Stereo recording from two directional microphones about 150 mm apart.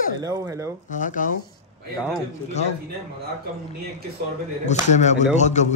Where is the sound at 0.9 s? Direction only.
60° left (ahead or behind).